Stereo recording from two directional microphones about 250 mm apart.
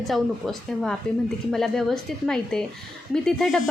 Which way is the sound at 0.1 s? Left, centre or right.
Centre.